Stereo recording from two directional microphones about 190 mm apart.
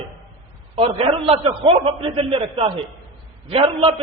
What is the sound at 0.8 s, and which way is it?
A man's voice, 30° right (ahead or behind).